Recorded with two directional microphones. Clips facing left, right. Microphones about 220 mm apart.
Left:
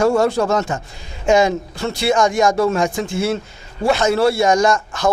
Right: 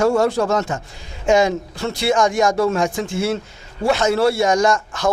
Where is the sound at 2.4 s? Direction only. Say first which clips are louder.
Left 1 dB; 25° left (ahead or behind).